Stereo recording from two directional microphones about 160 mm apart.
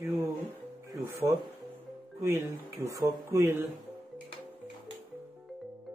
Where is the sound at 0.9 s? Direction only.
20° right (ahead or behind).